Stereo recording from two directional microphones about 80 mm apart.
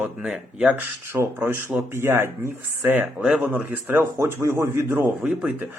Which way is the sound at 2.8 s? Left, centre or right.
Right.